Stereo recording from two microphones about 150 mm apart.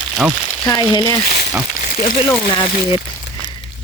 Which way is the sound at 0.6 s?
30° left (ahead or behind).